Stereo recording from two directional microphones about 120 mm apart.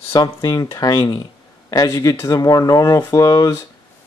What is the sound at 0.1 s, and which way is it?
Speech, 30° left (ahead or behind).